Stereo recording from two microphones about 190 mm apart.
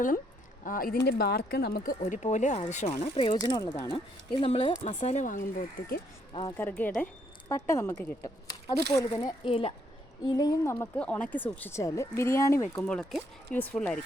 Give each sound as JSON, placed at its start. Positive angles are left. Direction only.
{"t": 0.6, "sound": "speech", "side_deg": 50}
{"t": 3.4, "sound": "speech", "side_deg": 20}
{"t": 5.8, "sound": "speech", "side_deg": 50}
{"t": 6.6, "sound": "a woman's voice", "side_deg": 10}
{"t": 9.4, "sound": "a woman's voice", "side_deg": 30}